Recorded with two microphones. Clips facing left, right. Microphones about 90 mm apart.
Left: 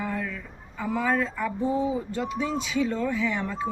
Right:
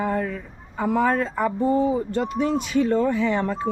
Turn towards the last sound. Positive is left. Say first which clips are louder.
# right 5 dB
turn(degrees=-60)  # may be behind; listen again after turning